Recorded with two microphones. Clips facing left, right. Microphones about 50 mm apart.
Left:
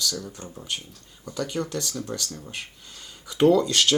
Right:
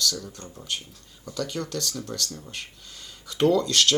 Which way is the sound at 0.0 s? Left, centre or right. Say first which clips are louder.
Right 1 dB; centre.